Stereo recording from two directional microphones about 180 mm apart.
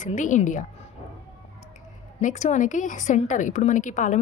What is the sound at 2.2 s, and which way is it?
A woman's voice, 40° left (ahead or behind).